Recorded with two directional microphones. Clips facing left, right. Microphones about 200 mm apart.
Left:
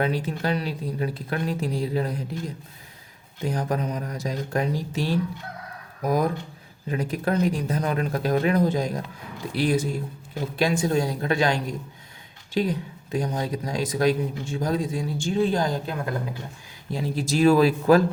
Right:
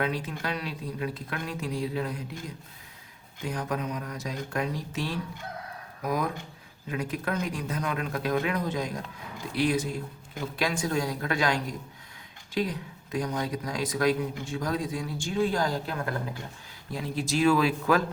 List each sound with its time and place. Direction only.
0.0 s speech: 30° left (ahead or behind)
3.4 s speech: 35° left (ahead or behind)
16.9 s speech: 35° left (ahead or behind)